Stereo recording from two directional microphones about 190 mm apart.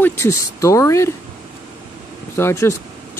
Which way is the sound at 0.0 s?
15° left (ahead or behind).